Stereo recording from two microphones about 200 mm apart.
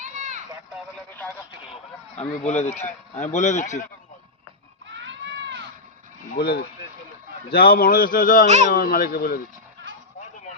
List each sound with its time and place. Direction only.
1.7 s a man's voice: 35° left (ahead or behind)
4.9 s a sound: 65° right (ahead or behind)
6.3 s speech: 55° left (ahead or behind)